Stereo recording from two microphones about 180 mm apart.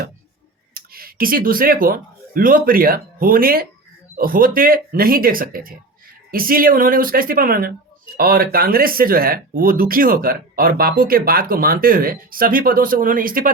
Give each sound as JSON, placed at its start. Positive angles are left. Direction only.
{"t": 0.7, "sound": "speech", "side_deg": -55}